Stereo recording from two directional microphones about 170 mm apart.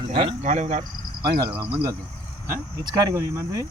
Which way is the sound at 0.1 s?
35° right (ahead or behind).